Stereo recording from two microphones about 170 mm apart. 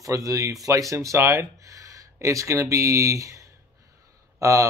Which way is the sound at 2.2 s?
15° right (ahead or behind).